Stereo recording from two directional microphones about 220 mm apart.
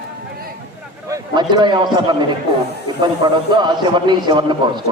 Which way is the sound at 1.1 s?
20° right (ahead or behind).